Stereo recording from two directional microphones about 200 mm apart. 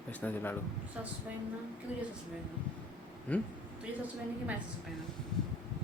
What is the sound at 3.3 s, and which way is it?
Speech, 5° left (ahead or behind).